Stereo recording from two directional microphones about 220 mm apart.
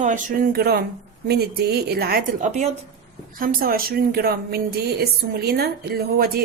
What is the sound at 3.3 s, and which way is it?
A woman's voice, 40° right (ahead or behind).